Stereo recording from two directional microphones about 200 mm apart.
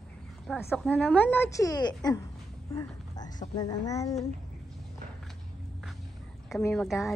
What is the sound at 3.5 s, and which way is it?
Speech, 15° left (ahead or behind).